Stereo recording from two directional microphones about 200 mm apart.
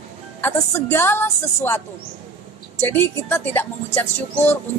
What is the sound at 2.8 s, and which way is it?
Speech, 10° left (ahead or behind).